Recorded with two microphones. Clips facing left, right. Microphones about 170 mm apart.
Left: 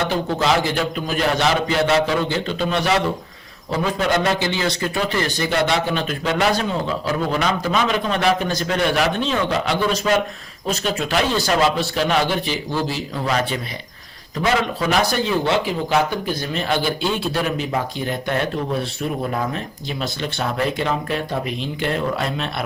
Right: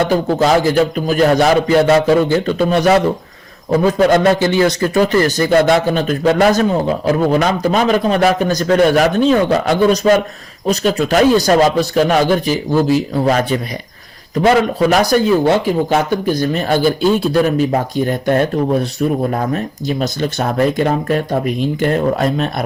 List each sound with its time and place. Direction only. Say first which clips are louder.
0.1 s speech: right 7 dB; 45° right (ahead or behind)